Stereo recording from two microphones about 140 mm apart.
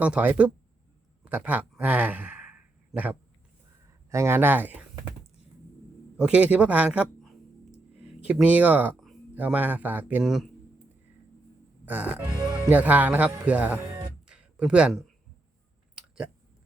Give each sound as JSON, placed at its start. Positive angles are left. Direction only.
{"t": 0.0, "sound": "a man's voice", "side_deg": -10}
{"t": 1.2, "sound": "a sound", "side_deg": -10}
{"t": 4.1, "sound": "a man's voice", "side_deg": -20}
{"t": 6.1, "sound": "a man's voice", "side_deg": -10}
{"t": 11.9, "sound": "a man's voice", "side_deg": -10}
{"t": 12.3, "sound": "music", "side_deg": -30}
{"t": 12.7, "sound": "a man's voice", "side_deg": -10}
{"t": 14.3, "sound": "a sound", "side_deg": -5}